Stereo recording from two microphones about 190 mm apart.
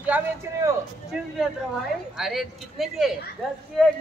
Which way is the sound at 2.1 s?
Centre (ahead or behind).